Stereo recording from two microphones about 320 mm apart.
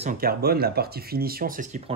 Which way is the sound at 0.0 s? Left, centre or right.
Right.